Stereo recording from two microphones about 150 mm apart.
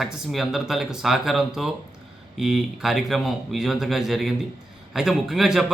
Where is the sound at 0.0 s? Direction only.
Centre (ahead or behind).